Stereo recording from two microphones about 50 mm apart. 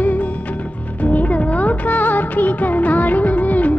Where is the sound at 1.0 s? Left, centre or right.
Left.